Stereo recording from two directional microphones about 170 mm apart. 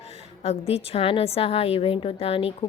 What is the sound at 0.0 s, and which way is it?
A woman's voice, 35° left (ahead or behind).